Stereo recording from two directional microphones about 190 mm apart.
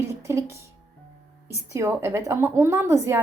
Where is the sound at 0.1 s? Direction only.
15° right (ahead or behind).